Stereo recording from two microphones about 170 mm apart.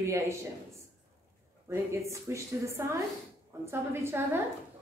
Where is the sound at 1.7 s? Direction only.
15° right (ahead or behind).